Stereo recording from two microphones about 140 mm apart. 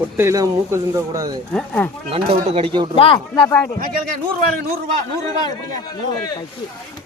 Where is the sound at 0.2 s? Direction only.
20° right (ahead or behind).